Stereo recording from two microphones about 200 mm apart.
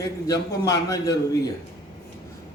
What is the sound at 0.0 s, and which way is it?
A man's voice, 15° left (ahead or behind).